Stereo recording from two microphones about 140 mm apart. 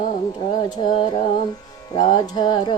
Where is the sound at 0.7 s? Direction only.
35° left (ahead or behind).